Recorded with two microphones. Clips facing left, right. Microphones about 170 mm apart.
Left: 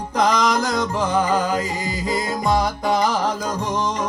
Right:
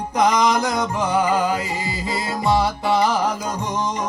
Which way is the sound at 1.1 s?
10° right (ahead or behind).